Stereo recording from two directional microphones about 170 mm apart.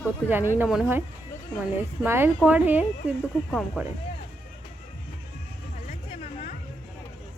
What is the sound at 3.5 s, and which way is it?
Speech, 5° left (ahead or behind).